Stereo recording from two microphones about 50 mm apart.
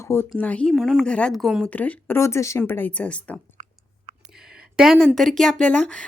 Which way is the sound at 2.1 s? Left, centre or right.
Left.